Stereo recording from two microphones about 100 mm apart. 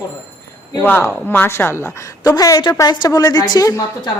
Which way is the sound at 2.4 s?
35° left (ahead or behind).